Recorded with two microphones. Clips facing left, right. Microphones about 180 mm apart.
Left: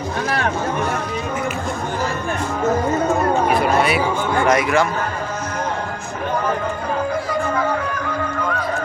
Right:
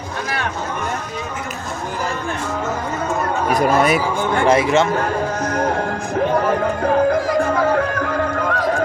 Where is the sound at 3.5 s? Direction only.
45° right (ahead or behind).